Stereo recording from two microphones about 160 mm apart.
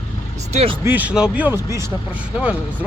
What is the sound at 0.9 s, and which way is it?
Speech, 10° right (ahead or behind).